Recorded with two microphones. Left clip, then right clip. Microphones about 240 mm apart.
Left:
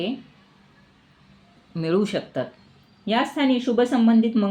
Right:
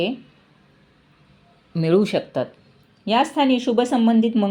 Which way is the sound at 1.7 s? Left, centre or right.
Right.